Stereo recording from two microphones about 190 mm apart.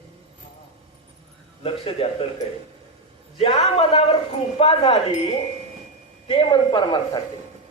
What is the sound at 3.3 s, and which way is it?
A man's voice, 30° left (ahead or behind).